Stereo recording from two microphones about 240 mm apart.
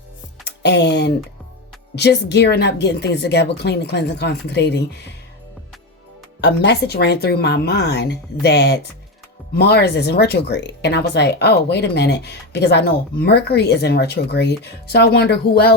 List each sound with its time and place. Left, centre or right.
0.4 s music: left
2.0 s speech: left
6.4 s speech: left